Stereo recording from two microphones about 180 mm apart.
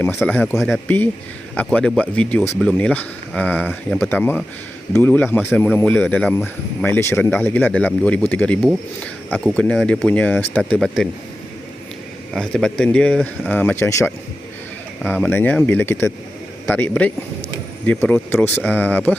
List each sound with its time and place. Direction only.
0.2 s speech: 10° left (ahead or behind)
0.9 s speech: 10° left (ahead or behind)
12.3 s speech: 5° left (ahead or behind)